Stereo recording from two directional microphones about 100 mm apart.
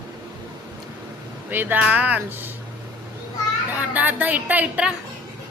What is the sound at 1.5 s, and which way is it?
Speech, 20° right (ahead or behind).